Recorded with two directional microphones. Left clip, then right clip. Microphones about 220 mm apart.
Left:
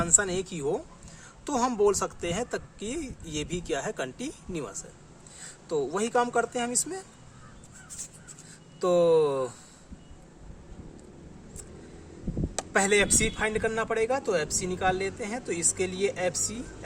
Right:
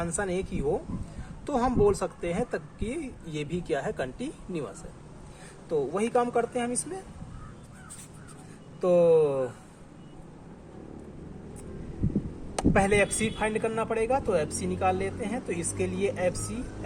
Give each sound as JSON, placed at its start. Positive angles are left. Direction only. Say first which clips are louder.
{"t": 0.0, "sound": "speech", "louder": "left 3 dB", "side_deg": 40}
{"t": 8.8, "sound": "speech", "louder": "right 1 dB", "side_deg": 40}
{"t": 12.7, "sound": "a man's voice", "louder": "left 1 dB", "side_deg": 40}